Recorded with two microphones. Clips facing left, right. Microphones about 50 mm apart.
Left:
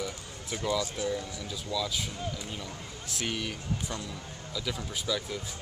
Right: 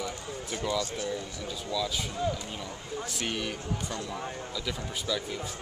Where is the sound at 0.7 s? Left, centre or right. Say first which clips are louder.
Left 1 dB; centre.